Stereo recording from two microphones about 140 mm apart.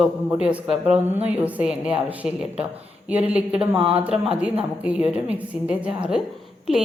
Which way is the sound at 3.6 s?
40° right (ahead or behind).